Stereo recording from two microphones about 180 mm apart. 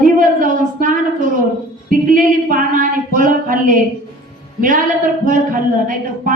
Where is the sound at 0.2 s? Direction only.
50° right (ahead or behind).